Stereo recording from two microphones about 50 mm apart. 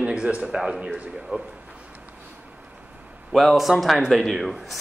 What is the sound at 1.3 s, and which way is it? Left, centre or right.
Speech, right.